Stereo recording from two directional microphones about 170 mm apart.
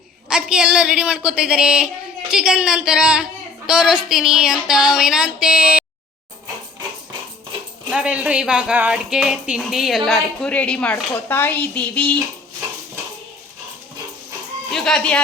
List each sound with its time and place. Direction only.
0.3 s speech: 5° right (ahead or behind)
7.9 s a woman's voice: 5° right (ahead or behind)
14.7 s speech: 5° left (ahead or behind)